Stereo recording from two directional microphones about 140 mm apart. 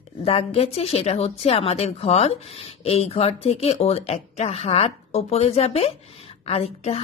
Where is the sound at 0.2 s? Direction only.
45° left (ahead or behind).